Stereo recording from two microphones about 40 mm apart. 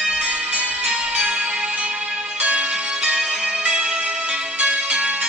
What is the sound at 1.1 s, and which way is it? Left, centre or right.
Music, right.